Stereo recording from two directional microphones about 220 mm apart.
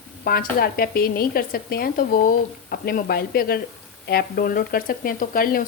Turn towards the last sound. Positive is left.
turn(degrees=40)  # may be behind; listen again after turning